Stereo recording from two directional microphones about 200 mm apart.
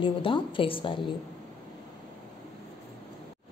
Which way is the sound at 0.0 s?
25° left (ahead or behind).